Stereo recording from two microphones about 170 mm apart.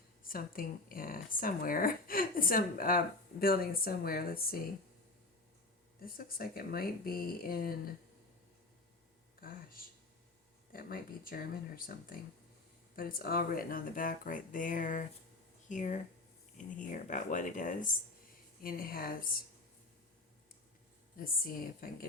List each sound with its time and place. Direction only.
0.2 s speech: 55° left (ahead or behind)
6.0 s speech: 60° left (ahead or behind)
9.4 s speech: 55° left (ahead or behind)
21.2 s speech: 55° left (ahead or behind)